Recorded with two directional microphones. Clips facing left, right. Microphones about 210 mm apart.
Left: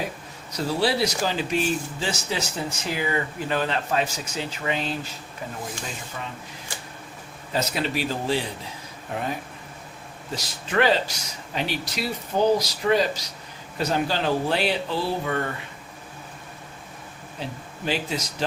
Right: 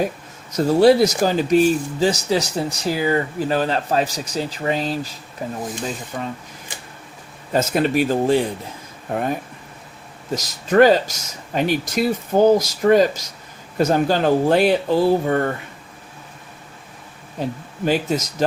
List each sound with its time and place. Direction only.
0.5 s speech: 45° right (ahead or behind)
7.5 s speech: 50° right (ahead or behind)
17.4 s speech: 45° right (ahead or behind)